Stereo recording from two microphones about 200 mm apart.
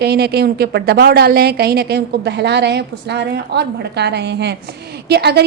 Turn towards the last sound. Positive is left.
turn(degrees=-55)  # may be behind; listen again after turning